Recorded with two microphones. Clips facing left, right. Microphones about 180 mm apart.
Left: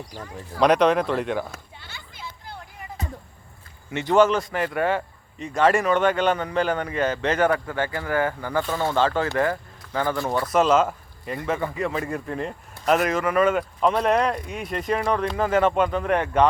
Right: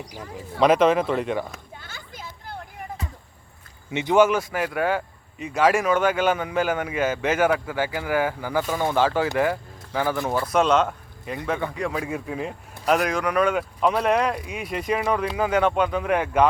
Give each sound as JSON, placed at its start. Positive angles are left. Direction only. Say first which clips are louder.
{"t": 0.6, "sound": "speech", "louder": "even", "side_deg": 0}
{"t": 1.7, "sound": "children playing", "louder": "right 3 dB", "side_deg": -45}
{"t": 3.9, "sound": "speech", "louder": "even", "side_deg": -15}